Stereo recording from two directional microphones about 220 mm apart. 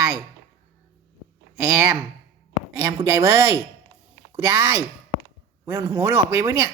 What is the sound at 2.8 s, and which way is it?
A woman's voice, 15° right (ahead or behind).